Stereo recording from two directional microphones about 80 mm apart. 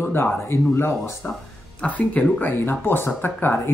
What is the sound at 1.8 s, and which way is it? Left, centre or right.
Speech, centre.